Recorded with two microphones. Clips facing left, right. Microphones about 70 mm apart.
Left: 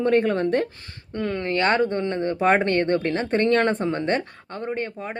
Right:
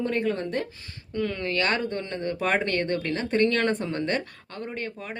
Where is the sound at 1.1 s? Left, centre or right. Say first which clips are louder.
Left 3 dB; left.